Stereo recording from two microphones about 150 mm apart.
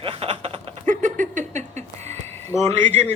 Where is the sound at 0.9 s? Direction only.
60° right (ahead or behind).